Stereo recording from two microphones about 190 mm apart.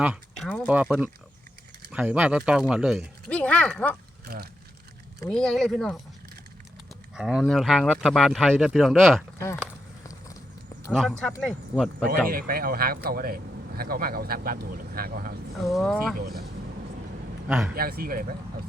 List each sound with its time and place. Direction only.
0.0 s speech: 5° right (ahead or behind)
0.4 s speech: 5° left (ahead or behind)
0.9 s speech: 5° right (ahead or behind)
4.3 s speech: 55° right (ahead or behind)
5.3 s speech: 5° left (ahead or behind)
7.2 s speech: centre (ahead or behind)
10.9 s speech: centre (ahead or behind)
12.3 s speech: 50° right (ahead or behind)
15.6 s speech: centre (ahead or behind)
16.1 s speech: 55° right (ahead or behind)
17.7 s speech: 50° right (ahead or behind)